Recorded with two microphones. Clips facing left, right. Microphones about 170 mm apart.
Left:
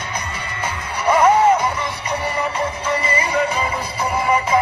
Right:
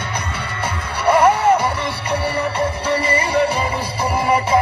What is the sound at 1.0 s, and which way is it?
Music, 30° right (ahead or behind).